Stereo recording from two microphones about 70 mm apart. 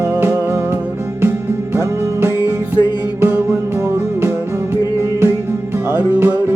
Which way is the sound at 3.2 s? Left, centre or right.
Right.